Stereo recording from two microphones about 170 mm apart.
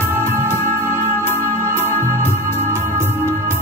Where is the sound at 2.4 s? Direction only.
15° left (ahead or behind).